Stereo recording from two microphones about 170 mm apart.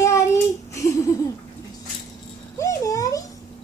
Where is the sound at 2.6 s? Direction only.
20° left (ahead or behind).